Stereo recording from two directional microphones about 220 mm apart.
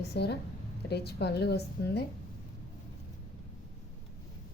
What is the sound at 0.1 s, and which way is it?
A woman's voice, 50° left (ahead or behind).